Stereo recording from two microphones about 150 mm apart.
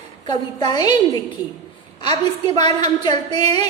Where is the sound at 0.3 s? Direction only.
30° left (ahead or behind).